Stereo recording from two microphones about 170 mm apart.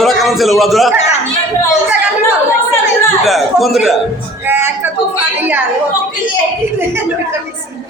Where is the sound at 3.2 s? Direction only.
Centre (ahead or behind).